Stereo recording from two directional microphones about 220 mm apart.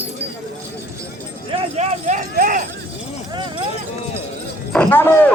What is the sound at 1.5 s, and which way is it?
Speech, 30° right (ahead or behind).